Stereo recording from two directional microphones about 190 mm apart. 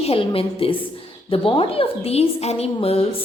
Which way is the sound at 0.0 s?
30° left (ahead or behind).